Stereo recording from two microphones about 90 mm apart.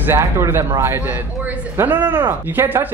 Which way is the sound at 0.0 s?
30° right (ahead or behind).